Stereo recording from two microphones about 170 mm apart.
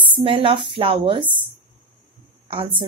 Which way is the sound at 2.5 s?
30° right (ahead or behind).